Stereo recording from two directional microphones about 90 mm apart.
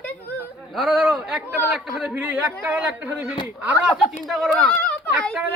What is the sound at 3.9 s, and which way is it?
Speech, centre (ahead or behind).